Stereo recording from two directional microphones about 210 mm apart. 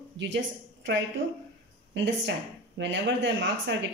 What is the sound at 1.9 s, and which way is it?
A woman's voice, 60° right (ahead or behind).